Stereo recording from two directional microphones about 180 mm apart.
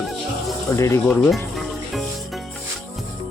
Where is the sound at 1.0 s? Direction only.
5° left (ahead or behind).